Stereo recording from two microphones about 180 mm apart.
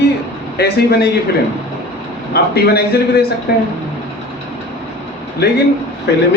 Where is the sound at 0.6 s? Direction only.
65° left (ahead or behind).